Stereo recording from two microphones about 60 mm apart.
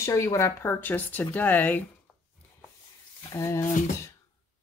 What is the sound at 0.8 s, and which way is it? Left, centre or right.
Speech, left.